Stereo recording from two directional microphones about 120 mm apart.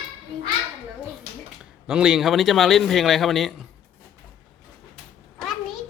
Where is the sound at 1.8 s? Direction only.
5° right (ahead or behind).